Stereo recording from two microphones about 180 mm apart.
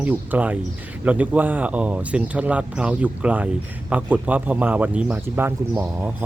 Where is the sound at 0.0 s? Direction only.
10° right (ahead or behind).